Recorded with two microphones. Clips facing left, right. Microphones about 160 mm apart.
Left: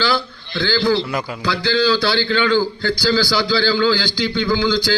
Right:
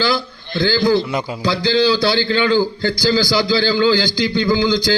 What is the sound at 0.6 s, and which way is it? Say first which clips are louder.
Speech: right 2 dB; 15° right (ahead or behind).